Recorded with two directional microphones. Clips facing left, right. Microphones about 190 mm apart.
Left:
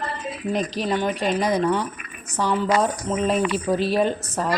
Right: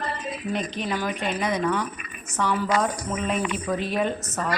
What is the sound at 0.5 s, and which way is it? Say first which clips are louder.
Speech: left 5 dB; 35° left (ahead or behind).